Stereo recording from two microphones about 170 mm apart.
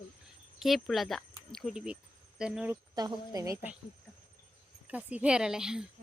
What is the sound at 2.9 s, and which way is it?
Speech, 20° right (ahead or behind).